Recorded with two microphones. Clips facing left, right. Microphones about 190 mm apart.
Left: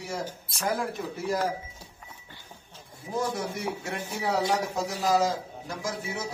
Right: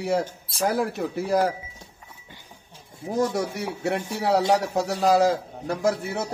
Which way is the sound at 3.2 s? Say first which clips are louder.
Right 5 dB; 70° right (ahead or behind).